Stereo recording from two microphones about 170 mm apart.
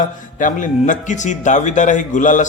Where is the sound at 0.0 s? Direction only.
50° left (ahead or behind).